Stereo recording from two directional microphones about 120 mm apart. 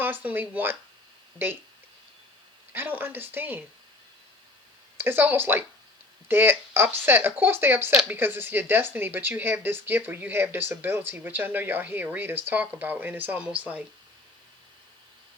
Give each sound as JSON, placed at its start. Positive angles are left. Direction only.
{"t": 0.0, "sound": "speech", "side_deg": -15}
{"t": 2.7, "sound": "speech", "side_deg": -15}
{"t": 4.9, "sound": "speech", "side_deg": -20}